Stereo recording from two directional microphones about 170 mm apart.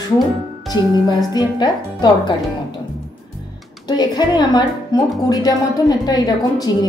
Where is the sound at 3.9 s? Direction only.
25° left (ahead or behind).